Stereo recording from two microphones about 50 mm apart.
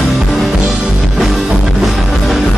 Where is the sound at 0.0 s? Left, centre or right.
Centre.